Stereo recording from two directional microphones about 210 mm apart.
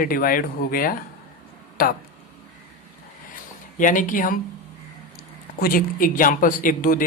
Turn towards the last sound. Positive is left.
turn(degrees=40)  # may be behind; listen again after turning